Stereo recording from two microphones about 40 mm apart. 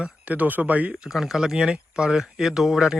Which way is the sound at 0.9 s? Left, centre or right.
Centre.